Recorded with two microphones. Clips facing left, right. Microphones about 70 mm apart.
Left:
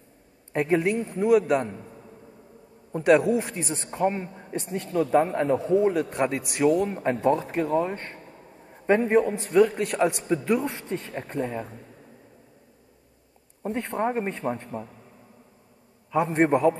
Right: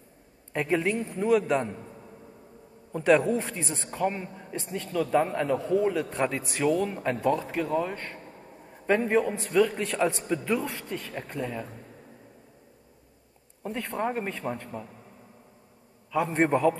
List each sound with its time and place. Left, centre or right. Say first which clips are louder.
0.5 s a man's voice: left 3 dB; centre
4.4 s a sound: left 4 dB; left
4.7 s a man's voice: left 3 dB; left
10.6 s a man's voice: left 3 dB; left
13.6 s a man's voice: left 3 dB; left
16.1 s a man's voice: left 3 dB; left
16.3 s a man's voice: left 2 dB; centre